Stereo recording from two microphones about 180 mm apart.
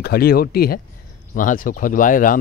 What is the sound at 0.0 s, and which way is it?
Speech, 60° left (ahead or behind).